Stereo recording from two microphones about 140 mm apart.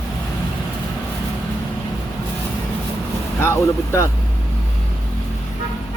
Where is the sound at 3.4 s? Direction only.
20° left (ahead or behind).